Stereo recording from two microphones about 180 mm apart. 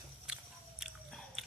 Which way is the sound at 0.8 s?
Centre (ahead or behind).